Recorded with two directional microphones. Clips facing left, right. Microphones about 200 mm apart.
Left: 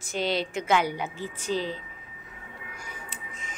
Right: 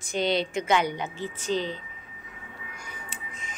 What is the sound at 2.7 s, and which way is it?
Music, 5° left (ahead or behind).